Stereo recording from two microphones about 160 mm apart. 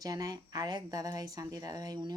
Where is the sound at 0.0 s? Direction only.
25° right (ahead or behind).